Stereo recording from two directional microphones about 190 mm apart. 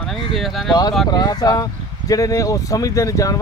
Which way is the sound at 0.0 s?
Centre (ahead or behind).